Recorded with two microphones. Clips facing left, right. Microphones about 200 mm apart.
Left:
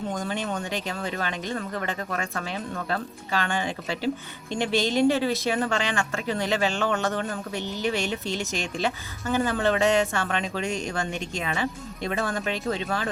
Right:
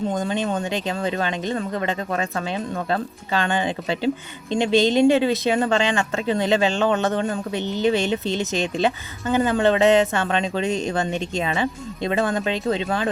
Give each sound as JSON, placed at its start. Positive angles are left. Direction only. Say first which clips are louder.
{"t": 0.1, "sound": "speech", "louder": "right 6 dB", "side_deg": -20}